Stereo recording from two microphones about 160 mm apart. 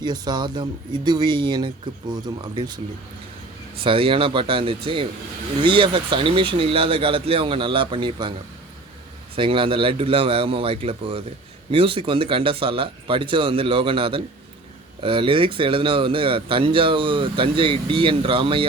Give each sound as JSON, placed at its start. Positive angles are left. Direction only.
{"t": 0.0, "sound": "speech", "side_deg": -25}
{"t": 3.8, "sound": "speech", "side_deg": -35}
{"t": 9.3, "sound": "speech", "side_deg": -35}